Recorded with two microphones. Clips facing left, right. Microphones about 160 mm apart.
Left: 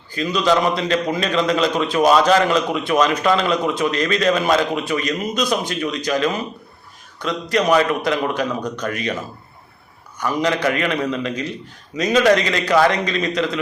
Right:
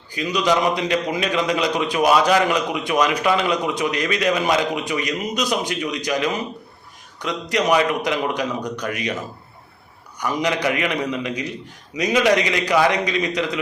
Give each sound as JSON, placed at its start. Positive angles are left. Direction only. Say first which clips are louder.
{"t": 0.1, "sound": "a man's voice", "louder": "left 2 dB", "side_deg": -15}
{"t": 10.2, "sound": "a man's voice", "louder": "left 2 dB", "side_deg": -15}